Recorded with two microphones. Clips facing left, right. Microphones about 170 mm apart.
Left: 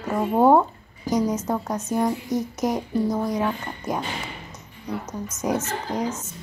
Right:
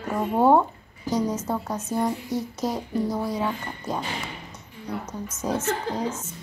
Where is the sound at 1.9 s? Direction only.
15° left (ahead or behind).